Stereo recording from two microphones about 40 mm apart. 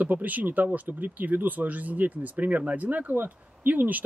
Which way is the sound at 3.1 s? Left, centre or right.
Right.